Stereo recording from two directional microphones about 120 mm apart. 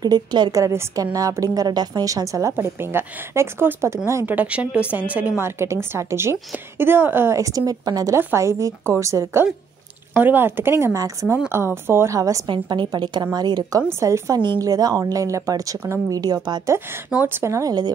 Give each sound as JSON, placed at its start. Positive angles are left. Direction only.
{"t": 0.0, "sound": "a woman's voice", "side_deg": -35}
{"t": 4.4, "sound": "a woman's voice", "side_deg": -10}
{"t": 12.4, "sound": "a woman's voice", "side_deg": -40}
{"t": 17.1, "sound": "speech", "side_deg": -15}